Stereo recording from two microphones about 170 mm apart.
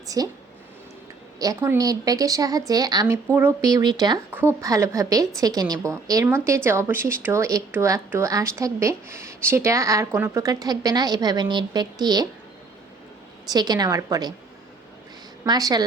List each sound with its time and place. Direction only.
0.2 s a woman's voice: 20° right (ahead or behind)
1.4 s a woman's voice: 20° right (ahead or behind)
4.3 s a woman's voice: 15° right (ahead or behind)
13.5 s a woman's voice: 25° right (ahead or behind)
15.4 s a woman's voice: 25° right (ahead or behind)